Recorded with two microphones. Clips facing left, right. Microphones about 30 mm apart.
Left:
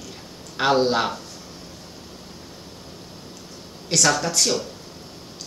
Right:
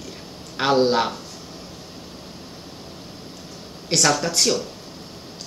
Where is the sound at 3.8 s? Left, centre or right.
Centre.